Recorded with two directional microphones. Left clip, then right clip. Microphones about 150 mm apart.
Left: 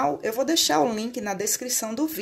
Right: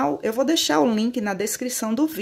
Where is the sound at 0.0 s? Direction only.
40° right (ahead or behind).